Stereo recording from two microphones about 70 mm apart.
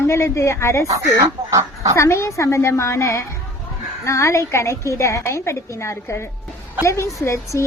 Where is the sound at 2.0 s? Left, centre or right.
Left.